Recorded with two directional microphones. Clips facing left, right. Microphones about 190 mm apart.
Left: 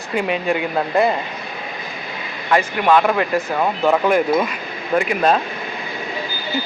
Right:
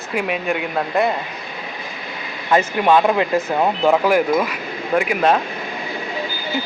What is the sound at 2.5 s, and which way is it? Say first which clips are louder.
Speech: right 1 dB; 20° right (ahead or behind).